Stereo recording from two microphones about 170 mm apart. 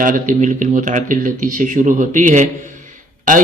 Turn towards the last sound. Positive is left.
turn(degrees=-50)  # may be behind; listen again after turning